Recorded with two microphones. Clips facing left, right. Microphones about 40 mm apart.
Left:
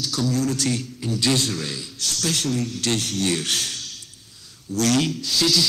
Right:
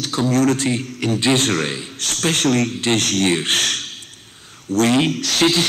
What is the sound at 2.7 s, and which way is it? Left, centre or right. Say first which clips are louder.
Speech: right 5 dB; right.